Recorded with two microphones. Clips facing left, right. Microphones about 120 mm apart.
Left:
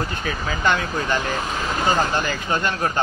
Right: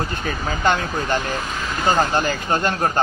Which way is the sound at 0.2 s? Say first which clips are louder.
Right 2 dB; 35° right (ahead or behind).